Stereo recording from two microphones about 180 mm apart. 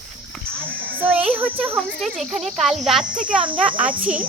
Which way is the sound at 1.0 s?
5° right (ahead or behind).